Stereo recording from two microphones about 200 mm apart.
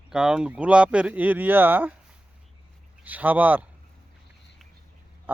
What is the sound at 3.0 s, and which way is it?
Speech, 10° right (ahead or behind).